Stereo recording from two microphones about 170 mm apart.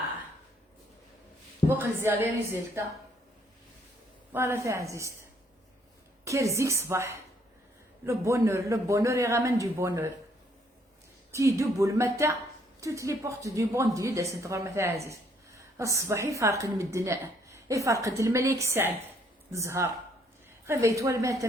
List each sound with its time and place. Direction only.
1.7 s a woman's voice: 15° right (ahead or behind)
4.3 s a woman's voice: 15° right (ahead or behind)
6.2 s a woman's voice: 20° right (ahead or behind)
11.3 s a woman's voice: 15° right (ahead or behind)